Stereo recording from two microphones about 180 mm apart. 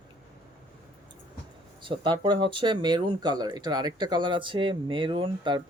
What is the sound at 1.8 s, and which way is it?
Speech, 25° right (ahead or behind).